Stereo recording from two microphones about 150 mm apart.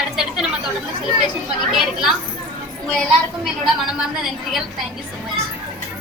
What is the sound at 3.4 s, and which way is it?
A woman's voice, centre (ahead or behind).